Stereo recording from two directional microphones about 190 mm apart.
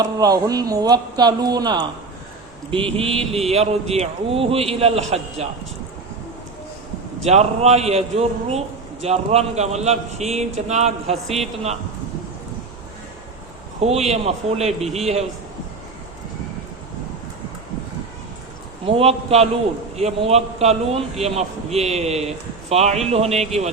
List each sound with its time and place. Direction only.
0.0 s a man's voice: 20° right (ahead or behind)
7.3 s a man's voice: 35° right (ahead or behind)
13.8 s a man's voice: 35° right (ahead or behind)
18.9 s a man's voice: 30° right (ahead or behind)